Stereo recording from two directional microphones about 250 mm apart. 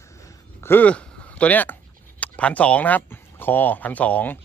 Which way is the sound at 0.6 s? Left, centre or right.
Centre.